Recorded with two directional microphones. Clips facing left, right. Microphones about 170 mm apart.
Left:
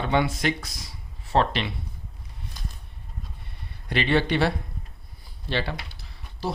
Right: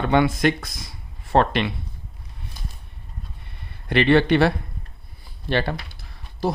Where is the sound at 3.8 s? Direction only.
60° right (ahead or behind).